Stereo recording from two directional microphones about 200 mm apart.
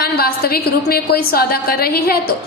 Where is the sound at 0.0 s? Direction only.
50° left (ahead or behind).